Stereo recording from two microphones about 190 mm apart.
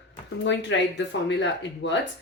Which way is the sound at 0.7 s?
70° left (ahead or behind).